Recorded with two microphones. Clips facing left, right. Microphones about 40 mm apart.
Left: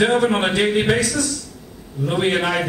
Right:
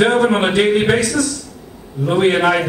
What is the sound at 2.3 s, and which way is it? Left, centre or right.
Speech, centre.